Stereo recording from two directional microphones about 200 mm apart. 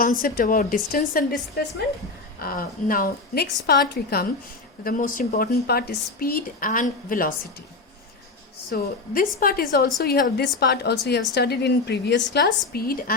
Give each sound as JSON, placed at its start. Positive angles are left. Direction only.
{"t": 0.0, "sound": "a woman's voice", "side_deg": 45}
{"t": 2.4, "sound": "a woman's voice", "side_deg": 45}
{"t": 8.7, "sound": "a woman's voice", "side_deg": 45}